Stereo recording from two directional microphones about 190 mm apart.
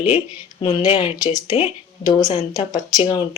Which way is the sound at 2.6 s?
30° left (ahead or behind).